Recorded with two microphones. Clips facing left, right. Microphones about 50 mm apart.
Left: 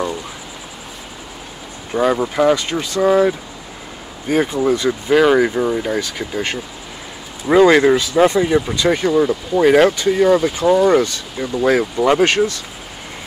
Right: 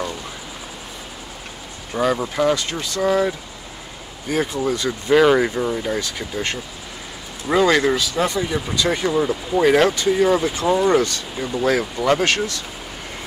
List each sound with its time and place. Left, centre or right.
2.0 s speech: centre
4.3 s speech: left
5.1 s speech: centre; by 8.6 s left
8.9 s speech: centre